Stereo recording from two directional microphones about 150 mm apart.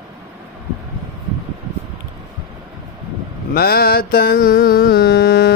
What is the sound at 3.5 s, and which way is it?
Mantra, 90° left.